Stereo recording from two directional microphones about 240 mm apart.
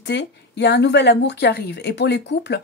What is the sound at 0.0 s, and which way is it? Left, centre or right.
A woman's voice, left.